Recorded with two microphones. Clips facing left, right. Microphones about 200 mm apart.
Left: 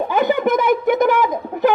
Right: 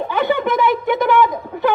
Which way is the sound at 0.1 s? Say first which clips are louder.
Left 1 dB; 45° left (ahead or behind).